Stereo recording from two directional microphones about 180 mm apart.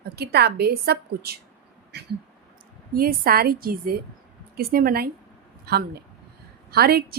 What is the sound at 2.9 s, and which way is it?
A woman's voice, 55° right (ahead or behind).